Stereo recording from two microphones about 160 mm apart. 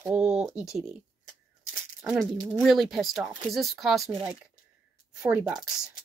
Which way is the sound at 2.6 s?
Centre (ahead or behind).